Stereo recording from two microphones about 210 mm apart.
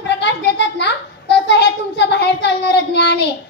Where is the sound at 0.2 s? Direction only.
55° left (ahead or behind).